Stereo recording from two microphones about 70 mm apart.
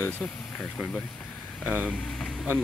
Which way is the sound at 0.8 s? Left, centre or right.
Centre.